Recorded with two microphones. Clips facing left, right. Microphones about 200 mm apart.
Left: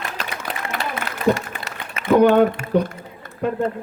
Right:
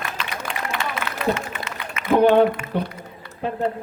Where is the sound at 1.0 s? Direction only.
40° left (ahead or behind).